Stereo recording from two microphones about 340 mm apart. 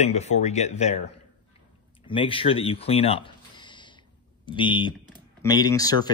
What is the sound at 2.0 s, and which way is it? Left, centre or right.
Speech, centre.